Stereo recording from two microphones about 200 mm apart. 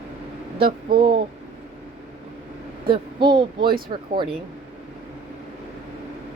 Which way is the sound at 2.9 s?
25° right (ahead or behind).